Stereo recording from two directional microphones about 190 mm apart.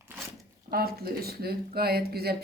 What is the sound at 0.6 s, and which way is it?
A woman's voice, 55° right (ahead or behind).